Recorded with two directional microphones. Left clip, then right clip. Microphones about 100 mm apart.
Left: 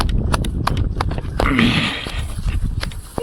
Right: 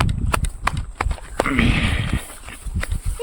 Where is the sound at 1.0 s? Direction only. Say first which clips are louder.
Left 1 dB; 30° left (ahead or behind).